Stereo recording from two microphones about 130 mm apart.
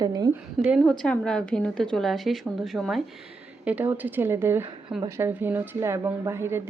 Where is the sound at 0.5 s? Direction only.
5° right (ahead or behind).